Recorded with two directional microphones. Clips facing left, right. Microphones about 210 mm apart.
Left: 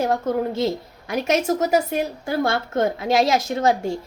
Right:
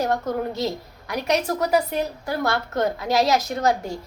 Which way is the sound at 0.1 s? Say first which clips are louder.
Left 3 dB; 25° left (ahead or behind).